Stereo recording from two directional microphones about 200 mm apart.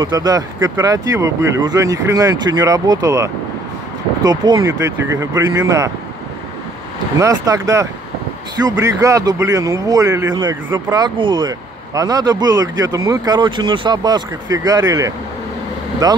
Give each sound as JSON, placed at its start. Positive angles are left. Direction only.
{"t": 0.0, "sound": "speech", "side_deg": -20}
{"t": 7.2, "sound": "speech", "side_deg": -15}